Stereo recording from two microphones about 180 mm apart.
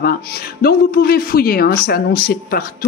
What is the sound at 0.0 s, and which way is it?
Speech, 55° left (ahead or behind).